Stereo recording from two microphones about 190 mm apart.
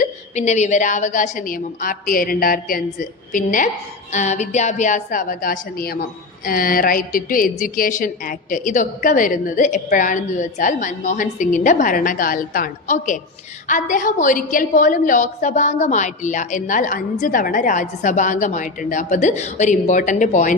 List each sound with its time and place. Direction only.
0.0 s a woman's voice: 40° left (ahead or behind)